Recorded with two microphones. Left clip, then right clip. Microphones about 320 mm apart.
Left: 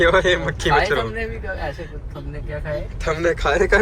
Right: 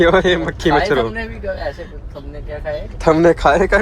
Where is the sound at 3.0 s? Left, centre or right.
Right.